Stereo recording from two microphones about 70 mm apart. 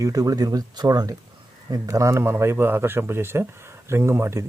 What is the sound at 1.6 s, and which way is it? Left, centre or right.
Speech, right.